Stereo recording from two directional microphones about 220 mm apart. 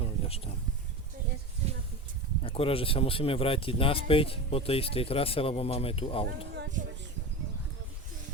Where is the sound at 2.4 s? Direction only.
25° left (ahead or behind).